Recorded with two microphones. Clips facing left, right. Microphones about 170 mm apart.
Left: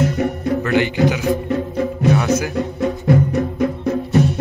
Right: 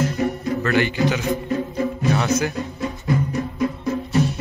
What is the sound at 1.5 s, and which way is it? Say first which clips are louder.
Music: left 3 dB; 60° left (ahead or behind).